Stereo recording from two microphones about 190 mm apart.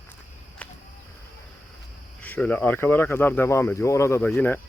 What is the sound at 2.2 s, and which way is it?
Speech, 10° left (ahead or behind).